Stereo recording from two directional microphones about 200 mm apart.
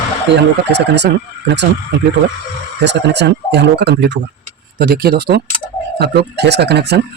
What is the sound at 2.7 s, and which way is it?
Speech, 60° right (ahead or behind).